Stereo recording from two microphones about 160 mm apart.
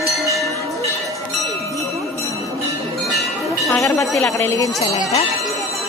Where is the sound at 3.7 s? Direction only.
20° left (ahead or behind).